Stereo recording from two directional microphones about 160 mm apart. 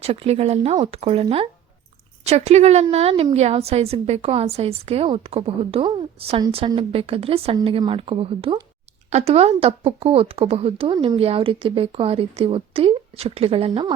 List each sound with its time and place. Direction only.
0.0 s a woman's voice: 40° right (ahead or behind)